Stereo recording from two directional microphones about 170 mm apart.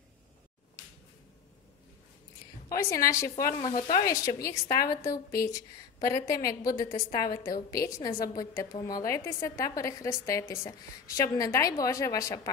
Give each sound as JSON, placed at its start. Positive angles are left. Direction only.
{"t": 2.8, "sound": "a woman's voice", "side_deg": 15}
{"t": 3.5, "sound": "sizzle", "side_deg": 45}
{"t": 4.1, "sound": "a woman's voice", "side_deg": 20}